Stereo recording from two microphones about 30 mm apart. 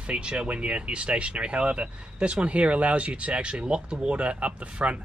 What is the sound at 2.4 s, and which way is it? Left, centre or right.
Speech, right.